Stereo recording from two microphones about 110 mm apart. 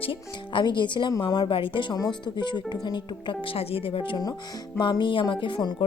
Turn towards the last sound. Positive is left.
turn(degrees=50)  # may be behind; listen again after turning